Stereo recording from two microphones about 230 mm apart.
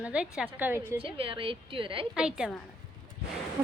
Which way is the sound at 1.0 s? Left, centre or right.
Right.